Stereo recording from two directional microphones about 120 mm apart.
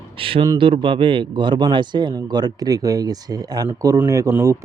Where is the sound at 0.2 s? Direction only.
50° right (ahead or behind).